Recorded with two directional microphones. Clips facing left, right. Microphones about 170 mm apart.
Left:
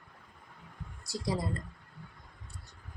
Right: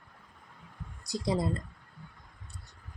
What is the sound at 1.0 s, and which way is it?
Speech, 20° right (ahead or behind).